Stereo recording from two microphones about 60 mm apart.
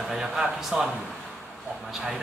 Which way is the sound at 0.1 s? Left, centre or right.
Centre.